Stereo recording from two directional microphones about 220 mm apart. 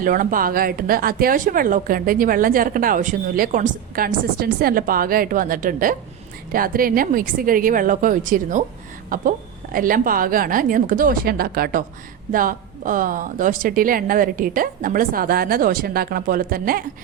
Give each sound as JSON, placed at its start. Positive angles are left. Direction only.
{"t": 0.0, "sound": "speech", "side_deg": -40}